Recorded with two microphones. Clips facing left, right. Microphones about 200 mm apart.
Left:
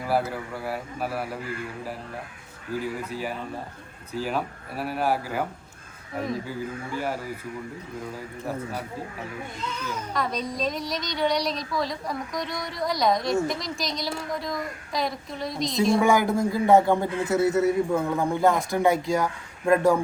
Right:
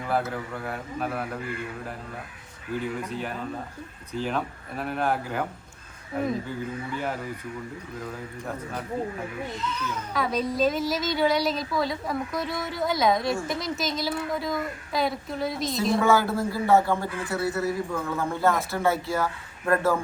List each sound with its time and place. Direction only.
0.0 s a woman's voice: 5° left (ahead or behind)
2.7 s a woman's voice: 5° left (ahead or behind)
6.9 s a man's voice: 5° left (ahead or behind)
10.1 s a woman's voice: 5° right (ahead or behind)
16.0 s a man's voice: 15° left (ahead or behind)